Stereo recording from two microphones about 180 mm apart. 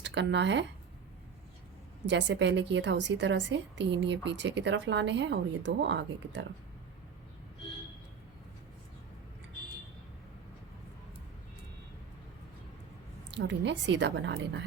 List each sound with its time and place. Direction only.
0.0 s speech: 80° right
2.0 s a woman's voice: 85° right
13.3 s a woman's voice: 80° right